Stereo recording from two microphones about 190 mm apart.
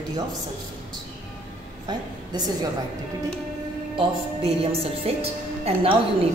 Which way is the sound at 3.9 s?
30° right (ahead or behind).